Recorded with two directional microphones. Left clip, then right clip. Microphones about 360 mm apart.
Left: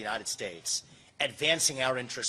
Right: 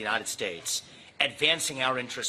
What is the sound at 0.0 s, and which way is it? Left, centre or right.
Speech, left.